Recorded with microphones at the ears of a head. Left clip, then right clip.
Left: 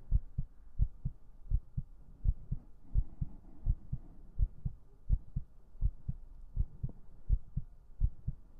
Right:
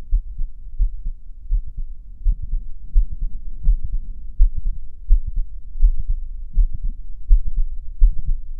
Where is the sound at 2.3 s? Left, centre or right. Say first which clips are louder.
Right 5 dB; right.